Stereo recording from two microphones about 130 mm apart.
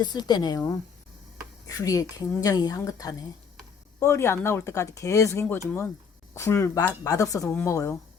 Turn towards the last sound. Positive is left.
turn(degrees=20)  # may be behind; listen again after turning